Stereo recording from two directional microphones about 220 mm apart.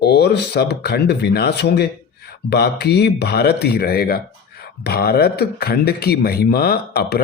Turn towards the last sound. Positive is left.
turn(degrees=45)  # may be behind; listen again after turning